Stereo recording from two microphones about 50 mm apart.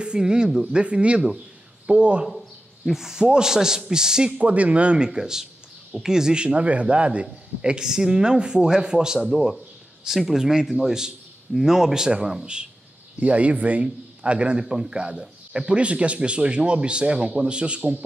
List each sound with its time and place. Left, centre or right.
0.0 s speech: centre
2.2 s a man's voice: centre
4.3 s speech: right
4.9 s a man's voice: centre
7.8 s a man's voice: centre
13.2 s speech: right